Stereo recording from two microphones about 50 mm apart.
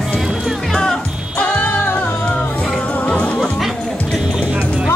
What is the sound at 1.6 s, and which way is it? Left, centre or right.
Music, left.